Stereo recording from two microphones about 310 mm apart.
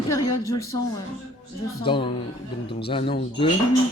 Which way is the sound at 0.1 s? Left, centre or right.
Centre.